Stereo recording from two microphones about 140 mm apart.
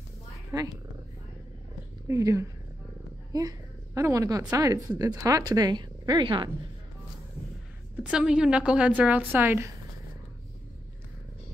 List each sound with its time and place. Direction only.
0.5 s speech: 25° right (ahead or behind)
2.0 s a woman's voice: 20° right (ahead or behind)
8.0 s a woman's voice: 5° right (ahead or behind)